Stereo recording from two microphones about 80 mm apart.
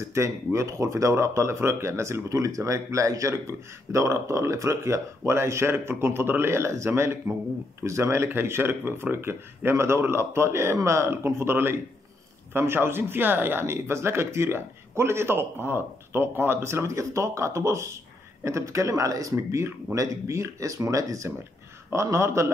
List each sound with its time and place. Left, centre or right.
0.0 s speech: right